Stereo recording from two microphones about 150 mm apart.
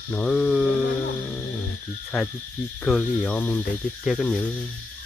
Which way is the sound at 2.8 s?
5° left (ahead or behind).